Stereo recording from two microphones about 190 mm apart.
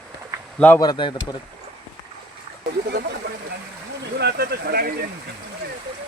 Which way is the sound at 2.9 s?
55° right (ahead or behind).